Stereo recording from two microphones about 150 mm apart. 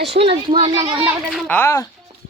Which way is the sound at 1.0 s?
5° right (ahead or behind).